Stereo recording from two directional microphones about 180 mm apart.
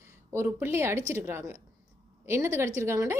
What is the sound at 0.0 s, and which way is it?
A woman's voice, 15° right (ahead or behind).